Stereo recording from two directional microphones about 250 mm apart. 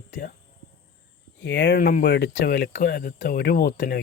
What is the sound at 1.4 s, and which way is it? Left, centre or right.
Speech, left.